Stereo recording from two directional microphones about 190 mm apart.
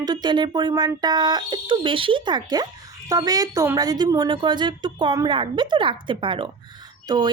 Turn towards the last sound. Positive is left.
turn(degrees=-20)  # may be behind; listen again after turning